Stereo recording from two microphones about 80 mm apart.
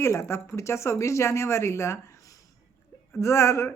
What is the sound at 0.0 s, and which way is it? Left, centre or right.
Speech, left.